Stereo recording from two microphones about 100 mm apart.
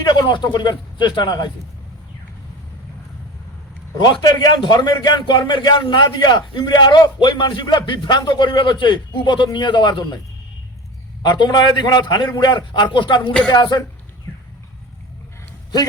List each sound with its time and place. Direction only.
0.0 s a man's voice: 45° left (ahead or behind)
4.0 s a man's voice: 50° left (ahead or behind)
11.2 s a man's voice: 45° left (ahead or behind)